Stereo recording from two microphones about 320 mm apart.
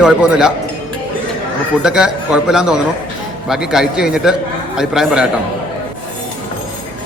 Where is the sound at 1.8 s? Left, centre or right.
Centre.